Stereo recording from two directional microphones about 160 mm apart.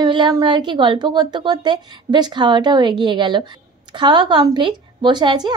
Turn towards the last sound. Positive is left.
turn(degrees=-25)  # may be behind; listen again after turning